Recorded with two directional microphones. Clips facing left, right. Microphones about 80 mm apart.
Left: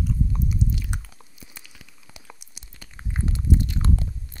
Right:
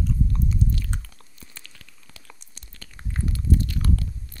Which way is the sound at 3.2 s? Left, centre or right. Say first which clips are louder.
Even; left.